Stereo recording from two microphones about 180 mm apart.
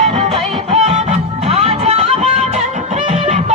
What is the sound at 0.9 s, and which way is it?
Music, 40° right (ahead or behind).